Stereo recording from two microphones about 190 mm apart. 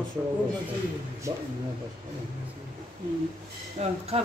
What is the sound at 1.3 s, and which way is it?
Speech, 15° right (ahead or behind).